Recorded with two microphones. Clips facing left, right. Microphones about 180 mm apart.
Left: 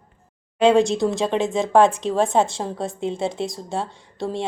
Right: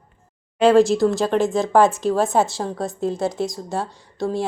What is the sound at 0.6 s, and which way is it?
Speech, centre (ahead or behind).